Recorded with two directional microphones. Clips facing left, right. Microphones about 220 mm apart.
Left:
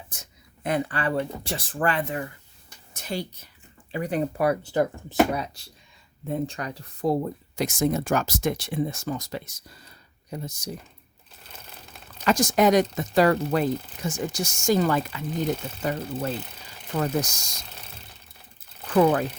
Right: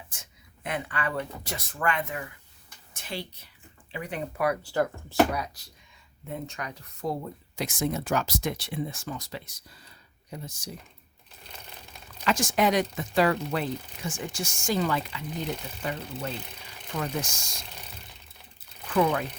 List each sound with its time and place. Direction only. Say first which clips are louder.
0.1 s speech: left 3 dB; 40° left (ahead or behind)
12.2 s speech: left 5 dB; 40° left (ahead or behind)
18.9 s speech: left 5 dB; 50° left (ahead or behind)